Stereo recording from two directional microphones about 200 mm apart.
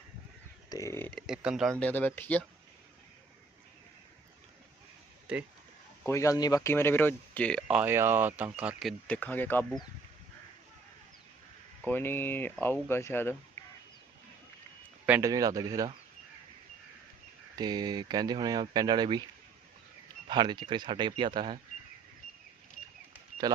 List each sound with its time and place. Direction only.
0.7 s speech: 15° left (ahead or behind)
1.3 s speech: 5° right (ahead or behind)
1.8 s speech: 10° left (ahead or behind)
5.3 s speech: 5° right (ahead or behind)
6.1 s speech: 15° left (ahead or behind)
7.8 s speech: 10° right (ahead or behind); by 9.8 s 10° left (ahead or behind)
11.9 s speech: 10° left (ahead or behind)
15.0 s speech: 10° right (ahead or behind)
17.6 s speech: 20° right (ahead or behind)
20.2 s speech: 20° right (ahead or behind)
23.4 s speech: 20° right (ahead or behind)